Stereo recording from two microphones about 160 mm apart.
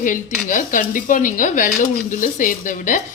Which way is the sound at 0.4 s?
55° left (ahead or behind).